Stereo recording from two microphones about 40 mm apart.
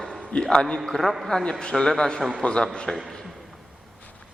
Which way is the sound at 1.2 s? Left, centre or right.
Centre.